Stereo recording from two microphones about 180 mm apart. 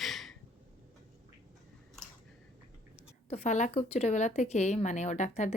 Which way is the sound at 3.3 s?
40° left (ahead or behind).